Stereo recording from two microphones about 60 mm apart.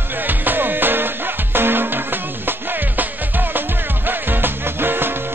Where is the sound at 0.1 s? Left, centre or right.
Right.